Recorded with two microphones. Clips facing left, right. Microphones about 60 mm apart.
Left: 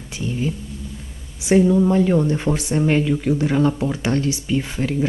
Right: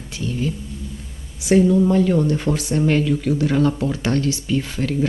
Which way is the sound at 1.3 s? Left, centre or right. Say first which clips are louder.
Even; left.